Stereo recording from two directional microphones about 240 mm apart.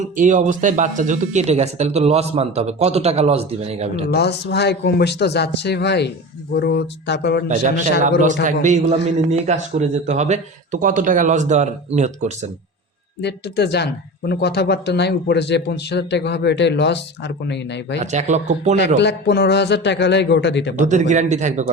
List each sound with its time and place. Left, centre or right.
0.0 s speech: right
4.1 s speech: left
8.0 s a man's voice: right
13.2 s speech: left
18.0 s speech: right
18.9 s speech: left
20.7 s speech: right